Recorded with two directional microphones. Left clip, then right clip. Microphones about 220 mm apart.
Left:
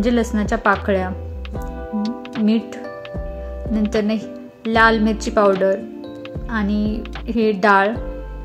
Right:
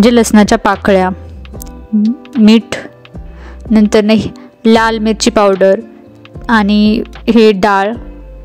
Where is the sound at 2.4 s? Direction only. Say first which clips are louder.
Right 12 dB; 45° right (ahead or behind).